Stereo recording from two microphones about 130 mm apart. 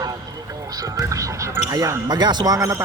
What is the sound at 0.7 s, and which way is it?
Speech, 25° right (ahead or behind).